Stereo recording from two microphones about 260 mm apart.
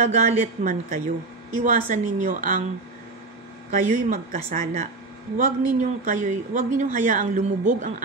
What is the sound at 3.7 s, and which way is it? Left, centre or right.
A woman's voice, right.